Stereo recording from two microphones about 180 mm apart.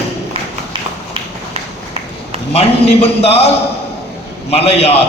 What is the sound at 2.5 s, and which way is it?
Speech, 35° left (ahead or behind).